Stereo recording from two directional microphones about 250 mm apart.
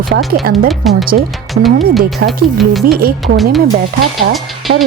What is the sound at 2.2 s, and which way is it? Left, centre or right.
Speech, centre.